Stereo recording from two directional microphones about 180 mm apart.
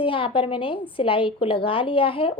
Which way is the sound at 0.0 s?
30° left (ahead or behind).